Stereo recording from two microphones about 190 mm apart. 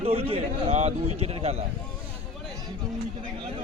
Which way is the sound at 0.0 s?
30° right (ahead or behind).